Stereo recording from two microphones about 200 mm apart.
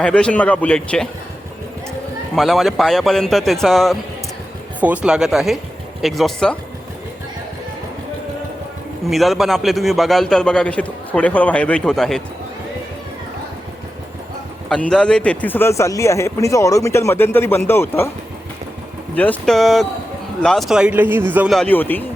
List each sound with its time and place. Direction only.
0.0 s a man's voice: 5° left (ahead or behind)
2.3 s a man's voice: centre (ahead or behind)
9.0 s a man's voice: centre (ahead or behind)
14.7 s speech: 5° left (ahead or behind)
19.1 s a man's voice: 10° left (ahead or behind)